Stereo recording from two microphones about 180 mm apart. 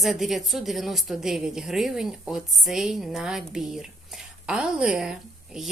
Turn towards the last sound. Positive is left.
turn(degrees=-5)  # may be behind; listen again after turning